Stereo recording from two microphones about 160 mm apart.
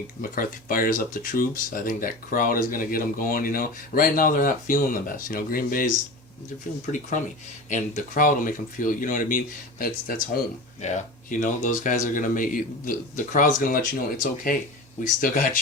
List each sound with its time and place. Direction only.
0.2 s speech: 65° left (ahead or behind)
7.7 s speech: 50° left (ahead or behind)
10.8 s speech: 45° left (ahead or behind)